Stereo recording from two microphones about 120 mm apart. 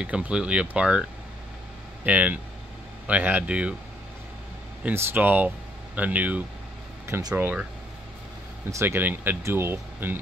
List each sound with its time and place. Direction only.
0.0 s speech: 10° right (ahead or behind)
2.0 s speech: 10° right (ahead or behind)
4.8 s speech: 15° right (ahead or behind)
7.1 s speech: 30° right (ahead or behind)
7.3 s speech: 15° right (ahead or behind)
8.7 s speech: 15° right (ahead or behind)